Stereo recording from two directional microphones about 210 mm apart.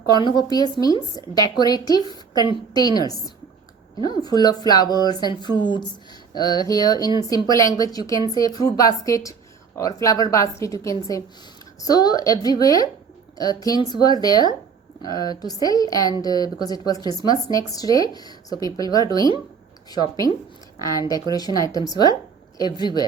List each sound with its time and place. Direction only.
0.2 s speech: 20° left (ahead or behind)
4.0 s a woman's voice: 20° left (ahead or behind)
21.3 s a woman's voice: 15° left (ahead or behind)